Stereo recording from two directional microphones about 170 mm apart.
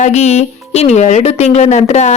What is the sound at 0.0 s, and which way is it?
Speech, 40° left (ahead or behind).